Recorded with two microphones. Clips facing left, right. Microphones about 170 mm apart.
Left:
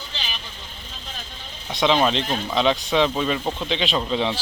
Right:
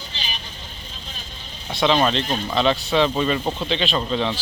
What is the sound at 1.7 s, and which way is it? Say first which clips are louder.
Speech: even; centre (ahead or behind).